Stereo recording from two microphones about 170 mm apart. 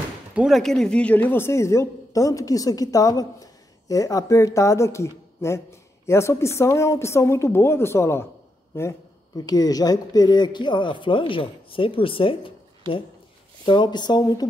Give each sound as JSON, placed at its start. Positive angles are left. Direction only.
{"t": 0.3, "sound": "speech", "side_deg": -5}